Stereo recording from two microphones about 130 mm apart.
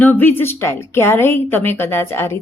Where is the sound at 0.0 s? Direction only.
15° left (ahead or behind).